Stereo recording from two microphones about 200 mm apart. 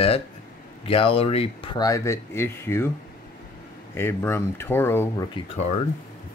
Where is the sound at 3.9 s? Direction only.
10° left (ahead or behind).